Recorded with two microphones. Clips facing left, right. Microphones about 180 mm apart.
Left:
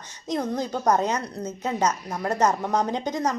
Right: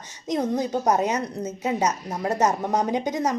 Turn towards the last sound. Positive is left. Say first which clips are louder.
# right 2 dB
turn(degrees=-15)  # may be behind; listen again after turning